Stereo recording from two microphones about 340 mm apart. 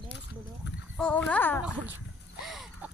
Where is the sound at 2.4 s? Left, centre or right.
Centre.